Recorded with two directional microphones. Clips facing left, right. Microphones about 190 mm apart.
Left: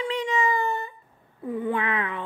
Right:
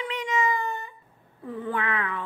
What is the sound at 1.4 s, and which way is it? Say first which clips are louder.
Speech: left 3 dB; 15° left (ahead or behind).